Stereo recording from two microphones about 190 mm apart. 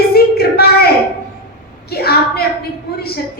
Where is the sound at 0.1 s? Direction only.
55° left (ahead or behind).